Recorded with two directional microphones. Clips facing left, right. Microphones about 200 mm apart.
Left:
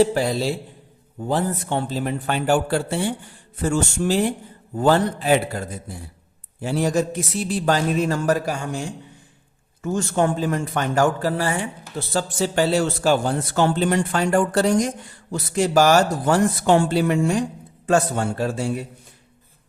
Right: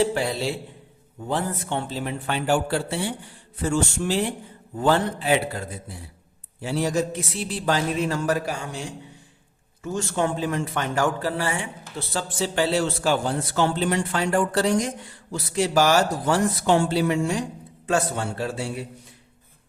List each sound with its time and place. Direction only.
0.0 s a man's voice: 40° left (ahead or behind)
6.6 s a man's voice: 50° left (ahead or behind)
9.8 s a man's voice: 45° left (ahead or behind)